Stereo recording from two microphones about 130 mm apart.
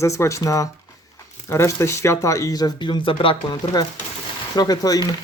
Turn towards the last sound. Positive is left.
turn(degrees=30)  # may be behind; listen again after turning